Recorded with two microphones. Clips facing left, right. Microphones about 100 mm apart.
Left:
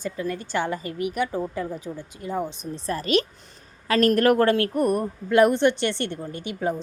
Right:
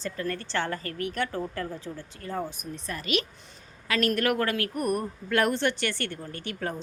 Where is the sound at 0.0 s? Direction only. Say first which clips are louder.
Left 3 dB; 10° left (ahead or behind).